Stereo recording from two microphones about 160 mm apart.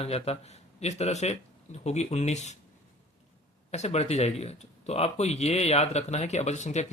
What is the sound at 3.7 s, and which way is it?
Speech, 40° left (ahead or behind).